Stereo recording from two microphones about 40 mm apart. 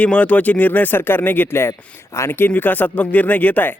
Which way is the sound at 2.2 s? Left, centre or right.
Left.